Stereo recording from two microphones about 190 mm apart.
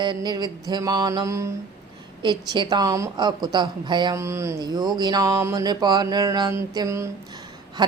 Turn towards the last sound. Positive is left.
turn(degrees=-20)  # may be behind; listen again after turning